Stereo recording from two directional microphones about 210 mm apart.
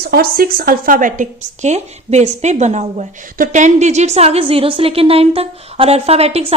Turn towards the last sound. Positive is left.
turn(degrees=-30)  # may be behind; listen again after turning